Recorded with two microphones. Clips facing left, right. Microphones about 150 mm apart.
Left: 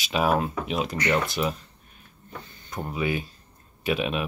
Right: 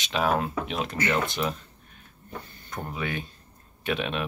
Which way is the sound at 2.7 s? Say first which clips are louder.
Left 4 dB; 5° left (ahead or behind).